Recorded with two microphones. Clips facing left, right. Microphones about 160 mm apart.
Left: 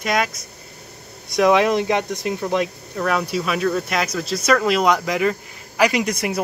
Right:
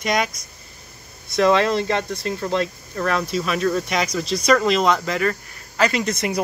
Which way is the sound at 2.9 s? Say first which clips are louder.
Left 1 dB; centre (ahead or behind).